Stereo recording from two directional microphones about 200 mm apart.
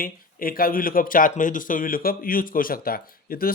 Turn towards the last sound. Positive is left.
turn(degrees=45)  # may be behind; listen again after turning